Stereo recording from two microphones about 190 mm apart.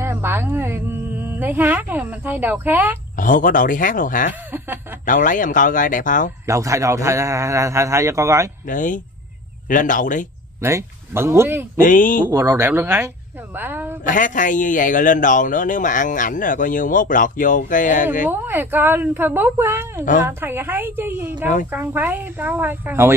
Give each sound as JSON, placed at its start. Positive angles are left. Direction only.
{"t": 0.0, "sound": "a woman's voice", "side_deg": -10}
{"t": 3.2, "sound": "a man's voice", "side_deg": 45}
{"t": 6.4, "sound": "a man's voice", "side_deg": -15}
{"t": 8.6, "sound": "a man's voice", "side_deg": 45}
{"t": 10.6, "sound": "a man's voice", "side_deg": -15}
{"t": 11.8, "sound": "a man's voice", "side_deg": 45}
{"t": 12.3, "sound": "a man's voice", "side_deg": -15}
{"t": 14.0, "sound": "a man's voice", "side_deg": 40}
{"t": 18.3, "sound": "a man's voice", "side_deg": -10}